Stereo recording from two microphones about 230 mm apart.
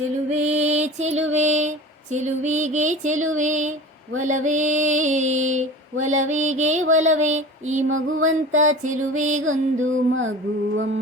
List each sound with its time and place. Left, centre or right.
0.3 s music: right
1.3 s mantra: right
7.9 s music: right
8.6 s mantra: right
9.4 s music: right